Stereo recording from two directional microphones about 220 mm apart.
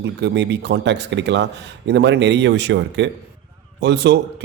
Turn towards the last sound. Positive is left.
turn(degrees=-50)  # may be behind; listen again after turning